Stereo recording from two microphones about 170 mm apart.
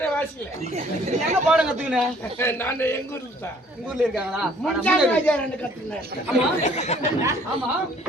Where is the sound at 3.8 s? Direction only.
5° right (ahead or behind).